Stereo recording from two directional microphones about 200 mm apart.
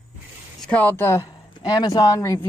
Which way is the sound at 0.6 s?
5° left (ahead or behind).